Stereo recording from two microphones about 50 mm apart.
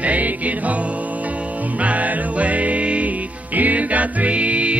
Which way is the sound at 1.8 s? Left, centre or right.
Right.